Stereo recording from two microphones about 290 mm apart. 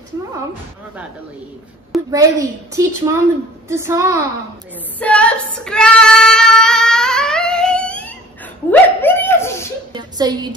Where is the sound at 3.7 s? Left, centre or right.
Centre.